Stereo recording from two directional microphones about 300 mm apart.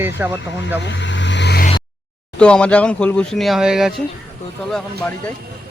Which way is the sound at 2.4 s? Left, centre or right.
Centre.